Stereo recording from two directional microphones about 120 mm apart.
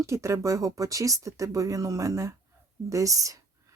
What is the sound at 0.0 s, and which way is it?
A woman's voice, 25° right (ahead or behind).